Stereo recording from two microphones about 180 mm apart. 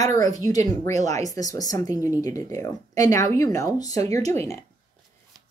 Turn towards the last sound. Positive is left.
turn(degrees=15)  # may be behind; listen again after turning